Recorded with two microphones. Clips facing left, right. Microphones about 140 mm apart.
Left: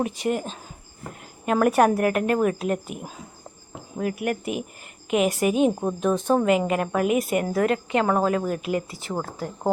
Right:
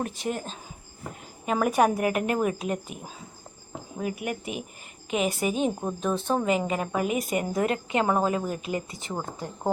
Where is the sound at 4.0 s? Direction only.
Centre (ahead or behind).